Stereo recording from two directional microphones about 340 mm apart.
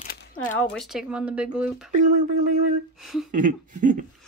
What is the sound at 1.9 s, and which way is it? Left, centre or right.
Speech, right.